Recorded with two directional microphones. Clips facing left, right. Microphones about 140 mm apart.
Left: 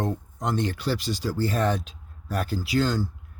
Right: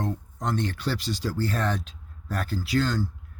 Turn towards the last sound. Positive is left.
turn(degrees=10)  # may be behind; listen again after turning